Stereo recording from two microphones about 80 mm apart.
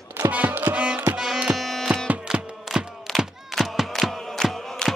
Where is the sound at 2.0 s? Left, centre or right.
Centre.